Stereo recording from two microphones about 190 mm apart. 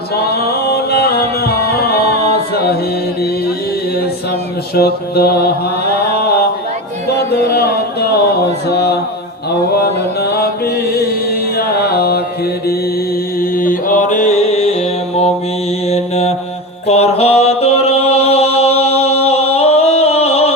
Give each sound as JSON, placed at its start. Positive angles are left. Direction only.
{"t": 0.3, "sound": "music", "side_deg": 55}
{"t": 4.7, "sound": "a sound", "side_deg": 55}
{"t": 8.7, "sound": "mantra", "side_deg": 60}
{"t": 10.2, "sound": "music", "side_deg": 55}
{"t": 13.4, "sound": "mantra", "side_deg": 50}
{"t": 16.8, "sound": "music", "side_deg": 35}